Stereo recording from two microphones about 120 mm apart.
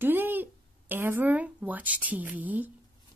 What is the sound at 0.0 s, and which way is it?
Speech, 15° right (ahead or behind).